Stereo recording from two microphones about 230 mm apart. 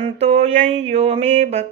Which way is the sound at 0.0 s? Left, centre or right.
Right.